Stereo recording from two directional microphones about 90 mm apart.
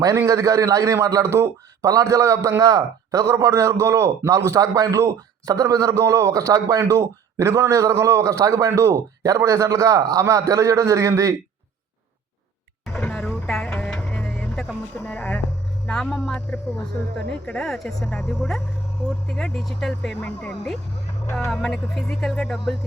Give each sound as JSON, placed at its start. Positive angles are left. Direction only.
{"t": 0.3, "sound": "a man's voice", "side_deg": -40}
{"t": 1.9, "sound": "a man's voice", "side_deg": -40}
{"t": 12.9, "sound": "music", "side_deg": 10}
{"t": 15.0, "sound": "speech", "side_deg": 15}